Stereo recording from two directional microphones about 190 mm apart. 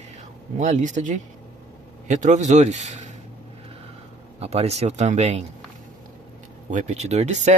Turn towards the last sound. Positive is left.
turn(degrees=-40)  # may be behind; listen again after turning